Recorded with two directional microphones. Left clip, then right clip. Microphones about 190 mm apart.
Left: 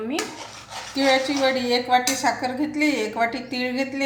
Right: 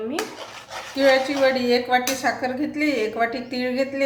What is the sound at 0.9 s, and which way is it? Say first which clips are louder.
A woman's voice: right 2 dB; centre (ahead or behind).